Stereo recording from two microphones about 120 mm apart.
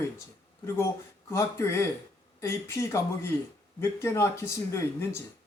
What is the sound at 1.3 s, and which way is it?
Speech, 20° left (ahead or behind).